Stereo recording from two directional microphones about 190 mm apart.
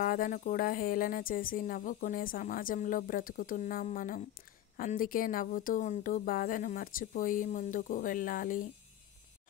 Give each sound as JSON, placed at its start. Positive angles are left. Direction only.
{"t": 0.0, "sound": "a woman's voice", "side_deg": 45}